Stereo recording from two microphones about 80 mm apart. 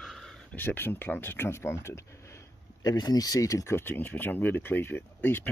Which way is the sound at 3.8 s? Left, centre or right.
Left.